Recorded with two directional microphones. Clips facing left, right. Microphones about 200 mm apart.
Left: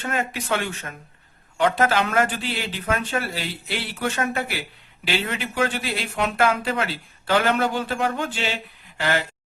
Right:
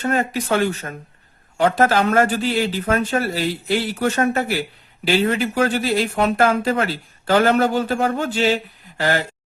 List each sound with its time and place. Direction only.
0.0 s speech: 40° right (ahead or behind)